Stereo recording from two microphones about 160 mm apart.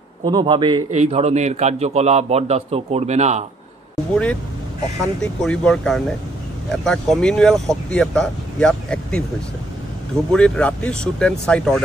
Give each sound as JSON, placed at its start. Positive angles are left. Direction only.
{"t": 0.2, "sound": "speech", "side_deg": -30}
{"t": 0.9, "sound": "a man's voice", "side_deg": -40}
{"t": 4.1, "sound": "speech", "side_deg": 5}
{"t": 10.3, "sound": "speech", "side_deg": 5}